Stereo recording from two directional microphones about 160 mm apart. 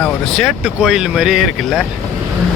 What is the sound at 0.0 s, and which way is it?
Speech, centre (ahead or behind).